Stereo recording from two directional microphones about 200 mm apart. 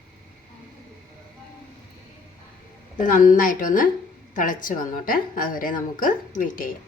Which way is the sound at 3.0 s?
45° left (ahead or behind).